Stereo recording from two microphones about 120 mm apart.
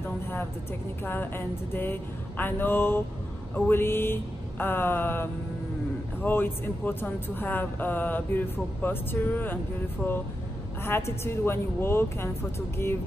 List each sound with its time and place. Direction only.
1.0 s speech: 20° left (ahead or behind)
10.9 s speech: 20° left (ahead or behind)